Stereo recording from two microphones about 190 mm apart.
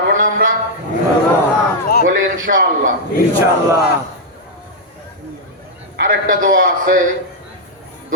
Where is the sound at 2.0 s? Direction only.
45° right (ahead or behind).